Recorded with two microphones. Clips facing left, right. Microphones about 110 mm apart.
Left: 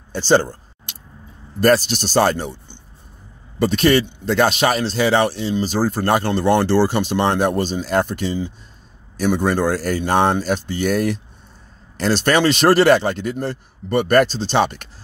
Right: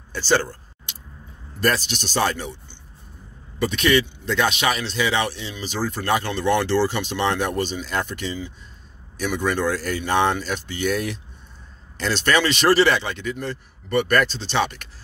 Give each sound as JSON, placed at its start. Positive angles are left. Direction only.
{"t": 0.1, "sound": "speech", "side_deg": 25}
{"t": 1.6, "sound": "speech", "side_deg": 40}